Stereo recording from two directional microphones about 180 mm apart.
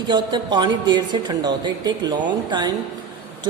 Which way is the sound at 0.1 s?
25° right (ahead or behind).